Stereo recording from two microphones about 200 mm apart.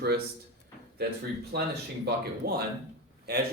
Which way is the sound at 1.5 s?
55° right (ahead or behind).